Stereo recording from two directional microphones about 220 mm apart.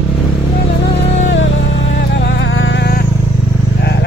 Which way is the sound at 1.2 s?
60° left (ahead or behind).